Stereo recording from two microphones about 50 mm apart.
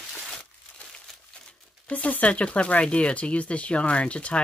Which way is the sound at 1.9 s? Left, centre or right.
Left.